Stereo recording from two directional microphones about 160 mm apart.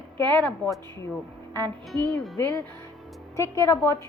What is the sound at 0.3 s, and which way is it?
Speech, 10° left (ahead or behind).